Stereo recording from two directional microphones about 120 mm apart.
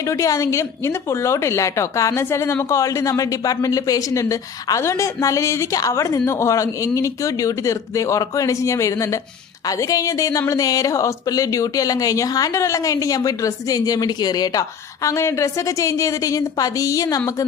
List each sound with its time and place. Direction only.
0.1 s a woman's voice: 25° left (ahead or behind)